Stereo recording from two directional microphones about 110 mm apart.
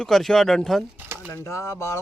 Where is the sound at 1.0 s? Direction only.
20° right (ahead or behind).